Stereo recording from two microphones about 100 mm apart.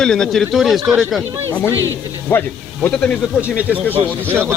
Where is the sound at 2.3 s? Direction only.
20° left (ahead or behind).